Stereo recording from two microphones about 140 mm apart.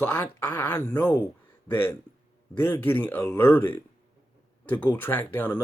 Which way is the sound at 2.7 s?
10° left (ahead or behind).